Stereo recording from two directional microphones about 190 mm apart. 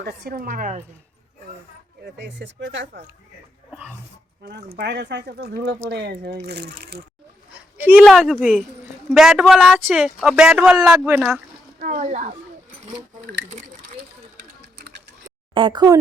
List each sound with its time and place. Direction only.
0.0 s a woman's voice: 60° right (ahead or behind)
2.0 s speech: 65° right (ahead or behind)
4.4 s speech: 60° right (ahead or behind)
7.8 s speech: 10° right (ahead or behind)
11.8 s speech: 40° right (ahead or behind)
15.5 s speech: 25° right (ahead or behind)